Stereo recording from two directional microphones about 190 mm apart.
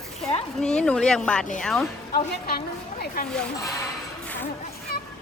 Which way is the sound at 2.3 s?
55° left (ahead or behind).